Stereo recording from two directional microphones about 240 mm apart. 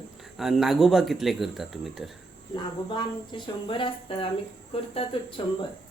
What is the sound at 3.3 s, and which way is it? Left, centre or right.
A woman's voice, centre.